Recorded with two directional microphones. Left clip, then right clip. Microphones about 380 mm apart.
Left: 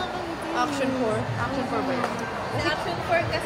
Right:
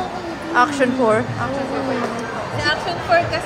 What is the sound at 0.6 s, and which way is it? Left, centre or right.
Speech, right.